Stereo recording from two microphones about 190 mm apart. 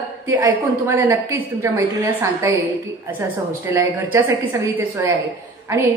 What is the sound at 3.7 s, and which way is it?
A woman's voice, 15° right (ahead or behind).